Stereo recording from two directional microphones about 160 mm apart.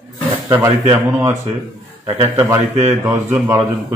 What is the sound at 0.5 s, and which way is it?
A man's voice, 20° right (ahead or behind).